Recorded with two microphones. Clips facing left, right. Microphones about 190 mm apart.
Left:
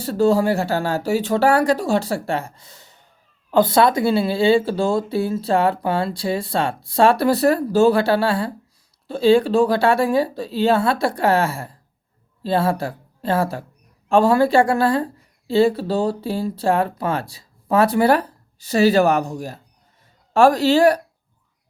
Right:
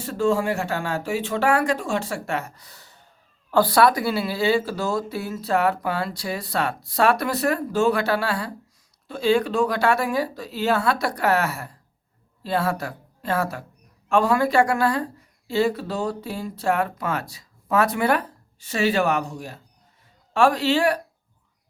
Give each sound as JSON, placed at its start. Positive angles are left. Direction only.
{"t": 0.0, "sound": "a woman's voice", "side_deg": 35}